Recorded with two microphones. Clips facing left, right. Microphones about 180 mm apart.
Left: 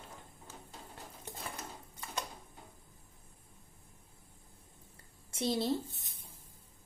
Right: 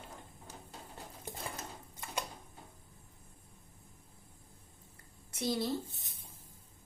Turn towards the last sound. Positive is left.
turn(degrees=25)  # may be behind; listen again after turning